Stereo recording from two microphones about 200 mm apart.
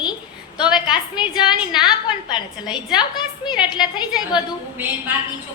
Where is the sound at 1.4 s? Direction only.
20° left (ahead or behind).